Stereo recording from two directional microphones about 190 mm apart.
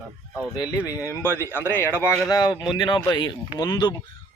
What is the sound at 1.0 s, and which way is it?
Speech, 15° left (ahead or behind).